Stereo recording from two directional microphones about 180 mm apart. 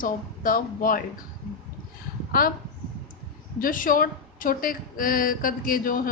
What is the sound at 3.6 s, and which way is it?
A woman's voice, 50° left (ahead or behind).